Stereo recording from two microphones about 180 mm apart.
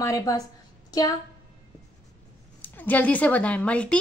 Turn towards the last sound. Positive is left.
turn(degrees=5)  # may be behind; listen again after turning